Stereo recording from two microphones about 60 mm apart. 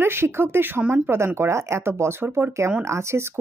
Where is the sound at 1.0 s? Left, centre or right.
Right.